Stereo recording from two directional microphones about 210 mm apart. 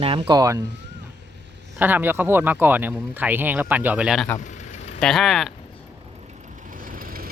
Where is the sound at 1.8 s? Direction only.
10° right (ahead or behind).